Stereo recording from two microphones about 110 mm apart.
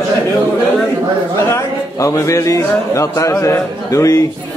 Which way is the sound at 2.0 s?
30° left (ahead or behind).